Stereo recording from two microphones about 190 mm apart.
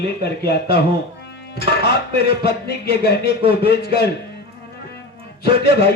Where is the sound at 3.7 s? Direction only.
60° left (ahead or behind).